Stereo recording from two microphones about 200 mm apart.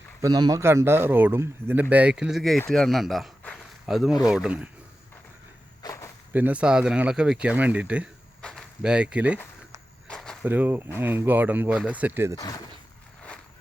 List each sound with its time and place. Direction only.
0.2 s speech: 20° right (ahead or behind)
5.8 s walk: 15° left (ahead or behind)
6.3 s speech: 10° right (ahead or behind)
8.4 s a sound: 5° left (ahead or behind)
10.4 s speech: 10° right (ahead or behind)
12.4 s speech: 20° left (ahead or behind)